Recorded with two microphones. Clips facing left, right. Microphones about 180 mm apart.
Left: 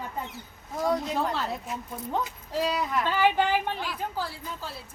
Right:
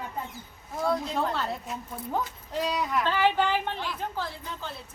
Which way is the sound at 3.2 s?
10° left (ahead or behind).